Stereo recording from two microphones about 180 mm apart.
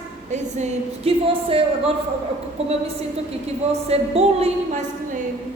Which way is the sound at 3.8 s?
35° right (ahead or behind).